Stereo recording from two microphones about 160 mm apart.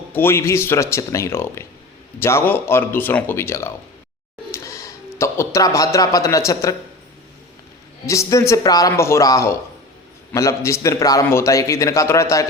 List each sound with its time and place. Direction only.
0.1 s speech: 15° left (ahead or behind)
8.0 s a man's voice: 20° left (ahead or behind)